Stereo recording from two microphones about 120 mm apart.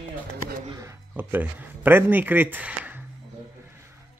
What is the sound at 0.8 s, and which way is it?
Speech, 15° right (ahead or behind).